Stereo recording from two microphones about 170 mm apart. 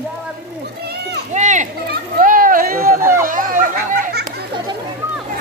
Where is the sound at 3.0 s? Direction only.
15° right (ahead or behind).